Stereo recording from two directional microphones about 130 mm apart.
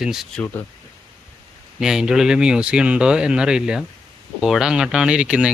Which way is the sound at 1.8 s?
5° right (ahead or behind).